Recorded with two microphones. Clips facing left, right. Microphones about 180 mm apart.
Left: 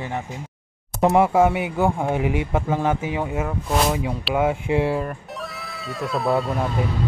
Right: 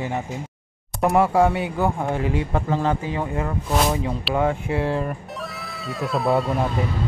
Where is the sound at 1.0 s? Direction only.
15° left (ahead or behind).